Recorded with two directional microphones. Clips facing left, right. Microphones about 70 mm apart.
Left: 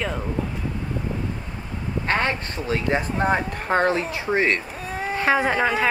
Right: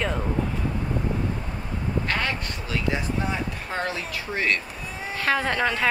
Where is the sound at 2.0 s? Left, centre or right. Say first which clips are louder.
Left 8 dB; left.